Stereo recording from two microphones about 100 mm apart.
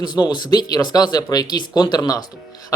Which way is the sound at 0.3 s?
45° left (ahead or behind).